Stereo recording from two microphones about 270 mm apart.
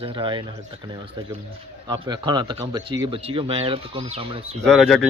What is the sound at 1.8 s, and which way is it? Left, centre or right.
A man's voice, centre.